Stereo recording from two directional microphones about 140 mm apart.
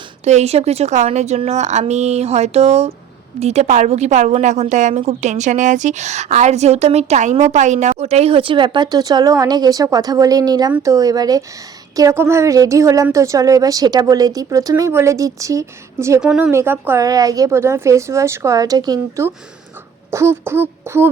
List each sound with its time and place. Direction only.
0.3 s a woman's voice: 50° right (ahead or behind); by 16.2 s 20° right (ahead or behind)
16.2 s speech: 5° right (ahead or behind)
16.5 s speech: 15° right (ahead or behind)
17.0 s a woman's voice: 25° right (ahead or behind)